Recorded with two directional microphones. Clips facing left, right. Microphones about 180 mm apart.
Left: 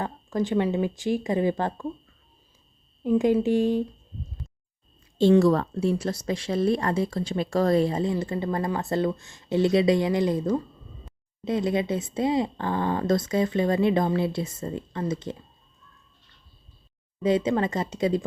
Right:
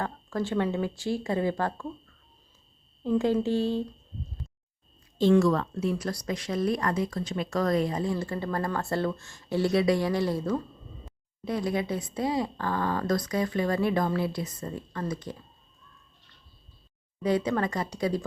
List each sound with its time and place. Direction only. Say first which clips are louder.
0.0 s speech: left 3 dB; 15° left (ahead or behind)
3.0 s speech: left 4 dB; 15° left (ahead or behind)
5.1 s speech: left 3 dB; 30° left (ahead or behind)
17.2 s speech: left 3 dB; 20° left (ahead or behind)